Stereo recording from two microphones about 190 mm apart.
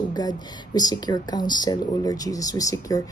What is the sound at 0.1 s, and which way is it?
A woman's voice, 20° left (ahead or behind).